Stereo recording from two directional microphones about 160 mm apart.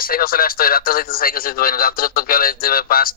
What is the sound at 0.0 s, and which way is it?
A man's voice, 65° left (ahead or behind).